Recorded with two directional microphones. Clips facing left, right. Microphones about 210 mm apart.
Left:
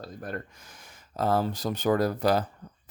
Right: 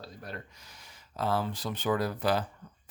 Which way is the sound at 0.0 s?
50° left (ahead or behind).